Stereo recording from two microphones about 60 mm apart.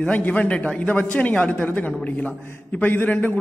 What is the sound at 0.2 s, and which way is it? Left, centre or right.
A man's voice, left.